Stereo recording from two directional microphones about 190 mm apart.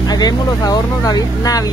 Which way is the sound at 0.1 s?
20° left (ahead or behind).